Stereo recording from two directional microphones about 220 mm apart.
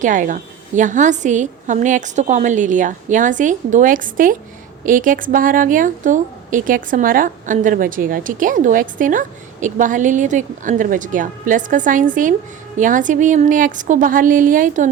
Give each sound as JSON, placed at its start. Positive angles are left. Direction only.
{"t": 0.0, "sound": "a woman's voice", "side_deg": -35}